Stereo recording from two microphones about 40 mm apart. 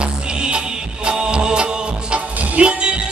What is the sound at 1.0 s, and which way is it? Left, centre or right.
Music, right.